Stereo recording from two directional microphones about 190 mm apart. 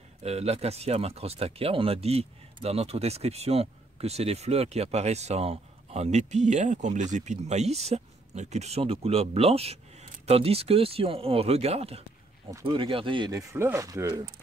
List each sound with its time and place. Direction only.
0.2 s speech: 35° right (ahead or behind)
12.4 s speech: 20° right (ahead or behind)